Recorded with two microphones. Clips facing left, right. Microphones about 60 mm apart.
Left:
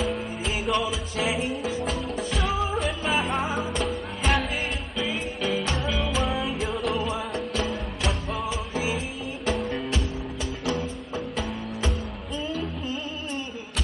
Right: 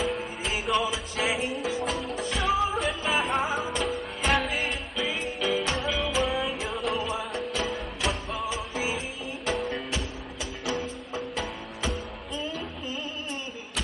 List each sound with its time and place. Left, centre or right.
0.7 s music: centre